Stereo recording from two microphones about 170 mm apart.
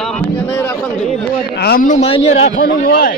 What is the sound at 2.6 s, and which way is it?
Speech, 60° left (ahead or behind).